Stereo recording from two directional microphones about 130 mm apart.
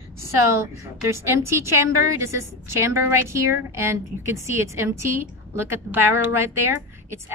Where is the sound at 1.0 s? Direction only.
20° right (ahead or behind).